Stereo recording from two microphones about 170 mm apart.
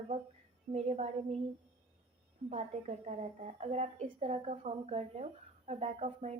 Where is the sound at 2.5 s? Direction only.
35° right (ahead or behind).